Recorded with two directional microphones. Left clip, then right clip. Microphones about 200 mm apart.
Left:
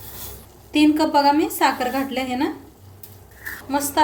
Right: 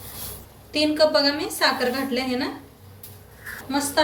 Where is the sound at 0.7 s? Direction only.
45° left (ahead or behind).